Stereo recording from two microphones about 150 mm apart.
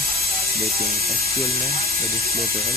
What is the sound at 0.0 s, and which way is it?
Music, 80° right.